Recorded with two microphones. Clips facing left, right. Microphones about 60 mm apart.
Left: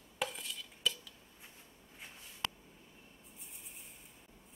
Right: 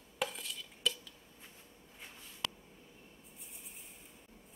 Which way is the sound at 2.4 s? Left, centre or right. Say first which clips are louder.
Left 1 dB; left.